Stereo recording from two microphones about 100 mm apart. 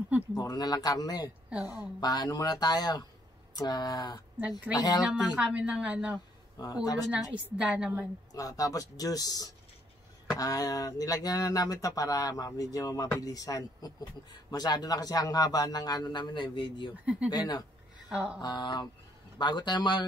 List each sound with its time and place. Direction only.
0.3 s speech: 40° left (ahead or behind)
1.5 s a woman's voice: 5° right (ahead or behind)
2.0 s speech: 40° left (ahead or behind)
4.4 s a woman's voice: 10° right (ahead or behind)
4.7 s speech: 40° left (ahead or behind)
5.0 s a woman's voice: 10° right (ahead or behind)
6.6 s speech: 40° left (ahead or behind)
7.4 s a woman's voice: 15° right (ahead or behind)
8.3 s speech: 35° left (ahead or behind); by 16.9 s 55° left (ahead or behind)
16.9 s a woman's voice: 10° right (ahead or behind)
17.3 s a man's voice: 45° left (ahead or behind)
18.1 s a woman's voice: 10° right (ahead or behind)
18.4 s a man's voice: 45° left (ahead or behind)